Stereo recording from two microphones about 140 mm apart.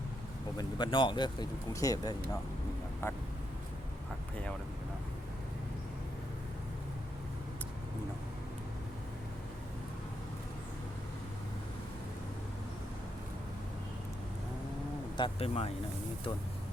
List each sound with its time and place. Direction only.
0.5 s speech: 35° left (ahead or behind)
15.1 s speech: 40° left (ahead or behind)